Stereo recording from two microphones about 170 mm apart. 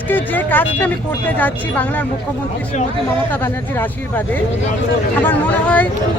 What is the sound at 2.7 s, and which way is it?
Speech, 45° left (ahead or behind).